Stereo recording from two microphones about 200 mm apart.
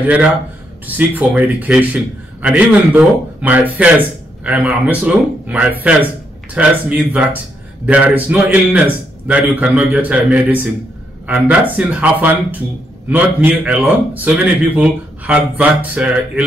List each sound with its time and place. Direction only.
0.0 s speech: 10° right (ahead or behind)